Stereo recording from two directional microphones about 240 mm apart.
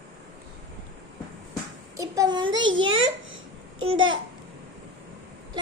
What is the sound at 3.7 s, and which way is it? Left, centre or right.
Babbling, right.